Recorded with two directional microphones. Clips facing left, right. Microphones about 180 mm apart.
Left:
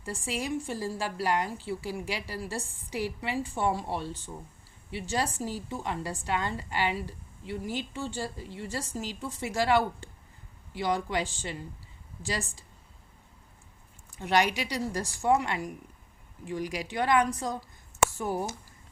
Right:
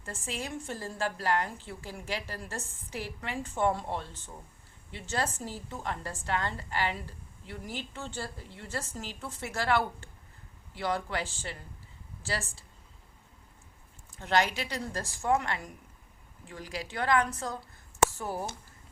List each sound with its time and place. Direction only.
0.0 s a woman's voice: 10° left (ahead or behind)
14.2 s a woman's voice: 15° left (ahead or behind)